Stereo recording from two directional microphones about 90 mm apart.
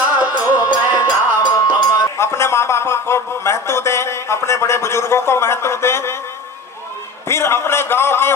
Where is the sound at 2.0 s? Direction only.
30° left (ahead or behind).